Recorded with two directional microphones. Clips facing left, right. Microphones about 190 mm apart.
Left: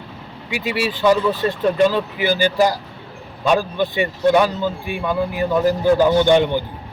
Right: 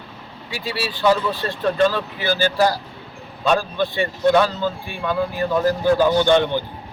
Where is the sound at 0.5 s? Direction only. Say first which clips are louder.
Left 5 dB; 15° left (ahead or behind).